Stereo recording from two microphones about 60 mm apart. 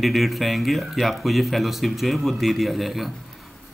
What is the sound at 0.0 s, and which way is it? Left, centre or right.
A man's voice, centre.